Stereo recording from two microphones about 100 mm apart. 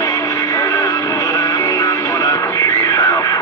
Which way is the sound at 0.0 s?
45° left (ahead or behind).